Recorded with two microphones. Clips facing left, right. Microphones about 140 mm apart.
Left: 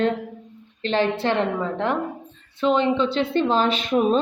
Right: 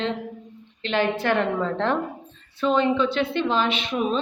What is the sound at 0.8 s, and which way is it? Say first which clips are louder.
Speech: left 2 dB; 35° left (ahead or behind).